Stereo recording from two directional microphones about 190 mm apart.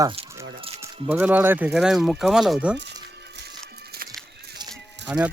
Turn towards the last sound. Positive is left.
turn(degrees=-5)  # may be behind; listen again after turning